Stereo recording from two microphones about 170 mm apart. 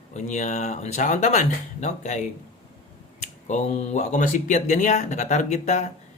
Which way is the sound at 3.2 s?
45° left (ahead or behind).